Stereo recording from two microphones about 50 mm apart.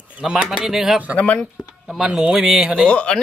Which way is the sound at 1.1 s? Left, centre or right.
Left.